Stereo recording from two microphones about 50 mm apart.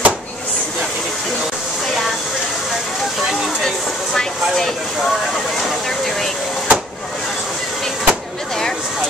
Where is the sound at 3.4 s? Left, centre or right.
Centre.